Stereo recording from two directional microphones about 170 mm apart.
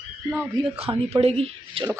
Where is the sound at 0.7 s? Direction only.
35° right (ahead or behind).